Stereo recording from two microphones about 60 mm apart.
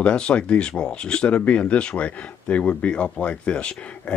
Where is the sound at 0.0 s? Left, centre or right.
Centre.